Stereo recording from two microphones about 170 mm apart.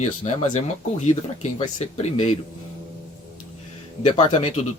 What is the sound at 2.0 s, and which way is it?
Speech, 40° left (ahead or behind).